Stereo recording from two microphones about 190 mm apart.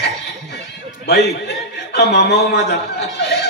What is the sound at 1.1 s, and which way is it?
Speech, 60° left (ahead or behind).